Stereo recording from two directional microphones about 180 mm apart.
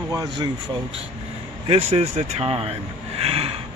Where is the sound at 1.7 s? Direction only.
35° right (ahead or behind).